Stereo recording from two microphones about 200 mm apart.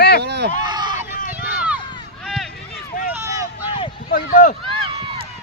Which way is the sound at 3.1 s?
15° right (ahead or behind).